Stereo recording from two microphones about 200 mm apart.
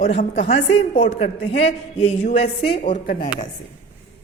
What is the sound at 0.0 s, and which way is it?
A woman's voice, 40° left (ahead or behind).